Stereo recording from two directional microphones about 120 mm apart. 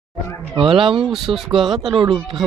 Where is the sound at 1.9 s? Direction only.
45° right (ahead or behind).